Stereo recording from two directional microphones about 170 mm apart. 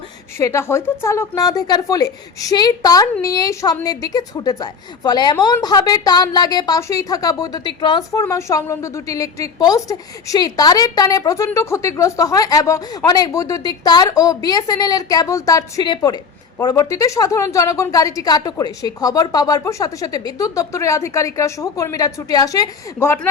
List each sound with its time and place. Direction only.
0.3 s a woman's voice: 15° left (ahead or behind)
8.2 s a woman's voice: 15° left (ahead or behind)